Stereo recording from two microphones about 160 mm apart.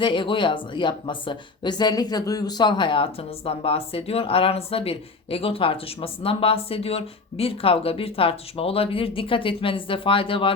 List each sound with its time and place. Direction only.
0.0 s speech: 30° left (ahead or behind)